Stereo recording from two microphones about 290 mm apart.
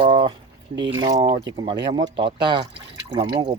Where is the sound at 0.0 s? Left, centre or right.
Centre.